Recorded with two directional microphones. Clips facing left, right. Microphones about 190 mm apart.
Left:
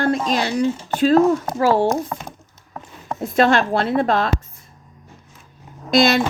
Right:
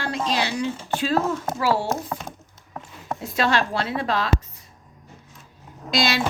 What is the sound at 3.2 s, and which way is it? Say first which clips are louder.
Speech: left 7 dB; 50° left (ahead or behind).